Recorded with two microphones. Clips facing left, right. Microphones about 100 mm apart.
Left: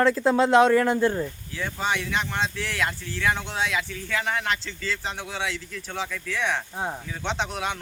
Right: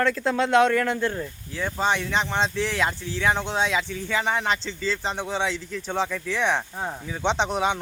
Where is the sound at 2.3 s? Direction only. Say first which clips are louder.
Right 3 dB; 25° right (ahead or behind).